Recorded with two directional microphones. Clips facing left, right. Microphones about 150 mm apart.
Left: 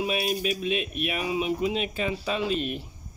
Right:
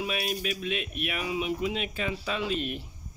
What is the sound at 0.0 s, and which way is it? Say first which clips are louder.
Speech: left 4 dB; 25° left (ahead or behind).